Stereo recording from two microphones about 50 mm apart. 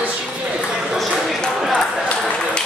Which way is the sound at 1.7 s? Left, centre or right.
Left.